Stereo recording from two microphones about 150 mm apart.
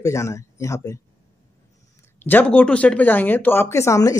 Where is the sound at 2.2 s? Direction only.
10° left (ahead or behind).